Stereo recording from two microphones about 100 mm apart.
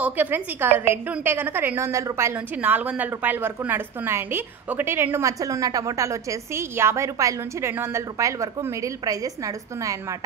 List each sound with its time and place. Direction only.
0.0 s a woman's voice: 20° right (ahead or behind)
2.3 s a woman's voice: 15° right (ahead or behind); by 10.1 s 35° right (ahead or behind)